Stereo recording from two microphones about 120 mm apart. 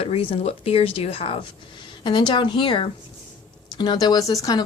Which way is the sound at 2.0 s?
40° left (ahead or behind).